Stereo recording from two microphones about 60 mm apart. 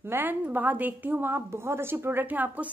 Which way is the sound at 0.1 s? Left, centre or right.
Right.